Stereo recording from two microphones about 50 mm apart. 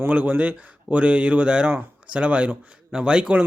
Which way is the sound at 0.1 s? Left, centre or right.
Right.